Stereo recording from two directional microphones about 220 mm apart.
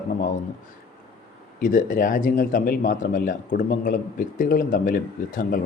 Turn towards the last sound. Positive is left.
turn(degrees=40)  # may be behind; listen again after turning